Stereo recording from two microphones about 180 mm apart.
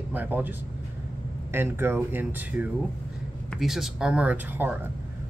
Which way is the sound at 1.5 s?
10° right (ahead or behind).